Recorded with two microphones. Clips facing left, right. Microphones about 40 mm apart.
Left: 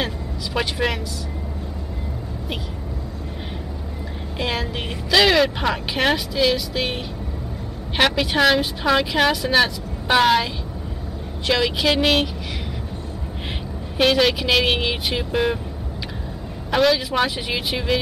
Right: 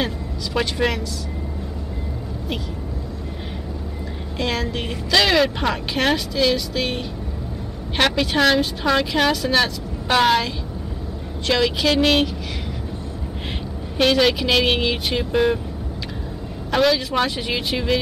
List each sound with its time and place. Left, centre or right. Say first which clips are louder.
0.6 s speech: right 1 dB; centre
4.4 s speech: right 1 dB; centre
8.0 s speech: even; centre
13.9 s speech: even; centre
16.7 s speech: even; centre